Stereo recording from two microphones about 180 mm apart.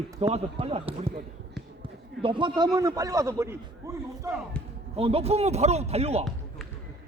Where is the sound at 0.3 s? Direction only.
35° right (ahead or behind).